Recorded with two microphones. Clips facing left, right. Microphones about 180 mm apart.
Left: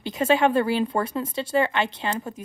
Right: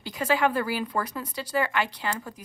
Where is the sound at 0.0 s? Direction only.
25° left (ahead or behind).